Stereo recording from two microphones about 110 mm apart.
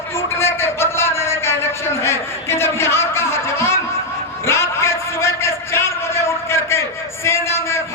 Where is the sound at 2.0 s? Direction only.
25° left (ahead or behind).